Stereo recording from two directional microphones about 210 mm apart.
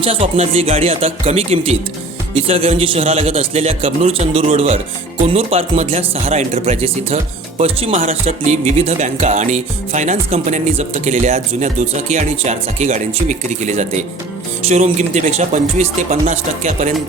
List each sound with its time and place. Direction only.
0.0 s a man's voice: 30° right (ahead or behind)